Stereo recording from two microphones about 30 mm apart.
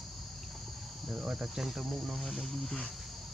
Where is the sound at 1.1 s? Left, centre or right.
Right.